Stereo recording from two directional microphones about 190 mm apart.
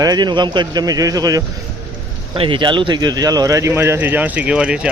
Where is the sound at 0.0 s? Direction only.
20° right (ahead or behind).